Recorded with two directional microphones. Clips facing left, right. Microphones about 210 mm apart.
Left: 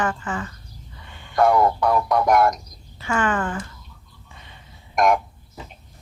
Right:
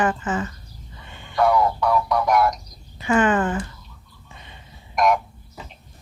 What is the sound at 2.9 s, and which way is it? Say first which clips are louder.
Speech: right 4 dB; 20° right (ahead or behind).